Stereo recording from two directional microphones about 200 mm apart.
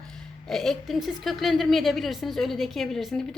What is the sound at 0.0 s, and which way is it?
Speech, 5° left (ahead or behind).